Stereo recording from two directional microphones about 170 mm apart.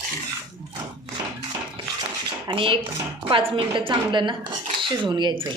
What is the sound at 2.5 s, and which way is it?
A woman's voice, 30° right (ahead or behind).